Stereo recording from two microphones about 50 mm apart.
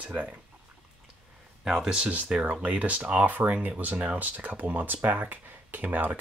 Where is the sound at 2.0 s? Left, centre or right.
Right.